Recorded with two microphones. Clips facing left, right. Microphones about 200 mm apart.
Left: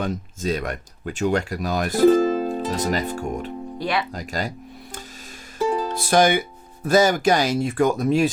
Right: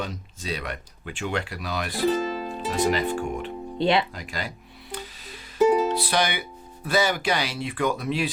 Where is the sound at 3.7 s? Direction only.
25° right (ahead or behind).